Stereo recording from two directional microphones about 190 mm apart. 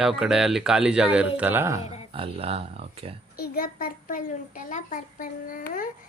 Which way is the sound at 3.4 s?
50° left (ahead or behind).